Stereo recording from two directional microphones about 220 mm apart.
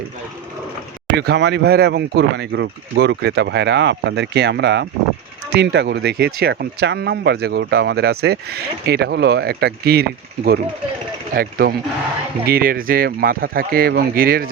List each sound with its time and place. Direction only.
1.1 s speech: 50° right (ahead or behind)